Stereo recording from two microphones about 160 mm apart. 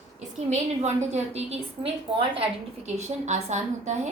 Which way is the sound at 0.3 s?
45° right (ahead or behind).